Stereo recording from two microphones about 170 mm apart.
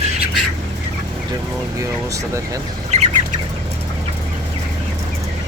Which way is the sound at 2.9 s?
45° right (ahead or behind).